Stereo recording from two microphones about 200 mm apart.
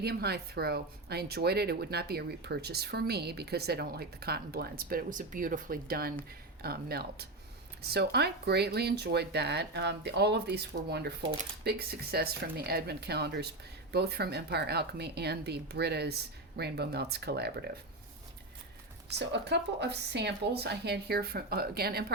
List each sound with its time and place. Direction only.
0.0 s a woman's voice: 55° right (ahead or behind)
19.2 s speech: 60° right (ahead or behind)